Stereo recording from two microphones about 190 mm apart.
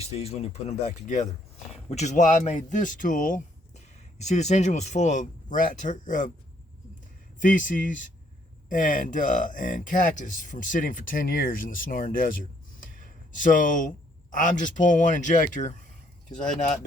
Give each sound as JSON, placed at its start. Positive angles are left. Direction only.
{"t": 0.0, "sound": "speech", "side_deg": 35}
{"t": 7.4, "sound": "speech", "side_deg": 45}
{"t": 13.3, "sound": "speech", "side_deg": 45}